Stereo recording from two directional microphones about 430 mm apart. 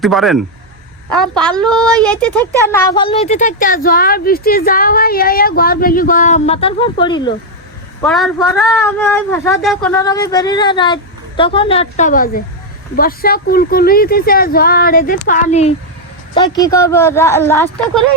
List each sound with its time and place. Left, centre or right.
0.0 s a woman's voice: centre
8.0 s a woman's voice: centre